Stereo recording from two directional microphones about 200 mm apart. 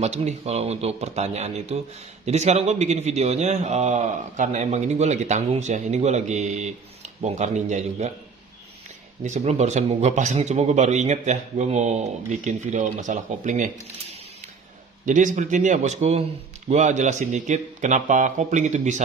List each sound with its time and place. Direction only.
0.0 s a man's voice: 35° right (ahead or behind)
9.2 s a man's voice: 35° right (ahead or behind)
15.0 s a man's voice: 40° right (ahead or behind)